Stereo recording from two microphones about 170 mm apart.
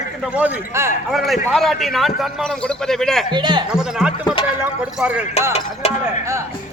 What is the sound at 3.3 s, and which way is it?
Speech, 25° right (ahead or behind).